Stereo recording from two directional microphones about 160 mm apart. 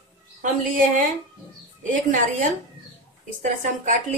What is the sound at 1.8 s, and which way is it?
Speech, 55° right (ahead or behind).